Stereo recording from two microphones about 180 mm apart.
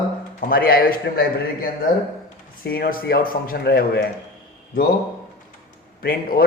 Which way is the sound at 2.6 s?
55° left (ahead or behind).